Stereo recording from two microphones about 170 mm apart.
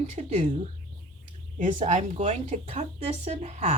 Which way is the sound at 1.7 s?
45° right (ahead or behind).